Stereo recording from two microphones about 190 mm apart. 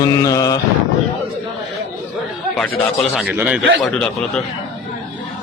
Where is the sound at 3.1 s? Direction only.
10° right (ahead or behind).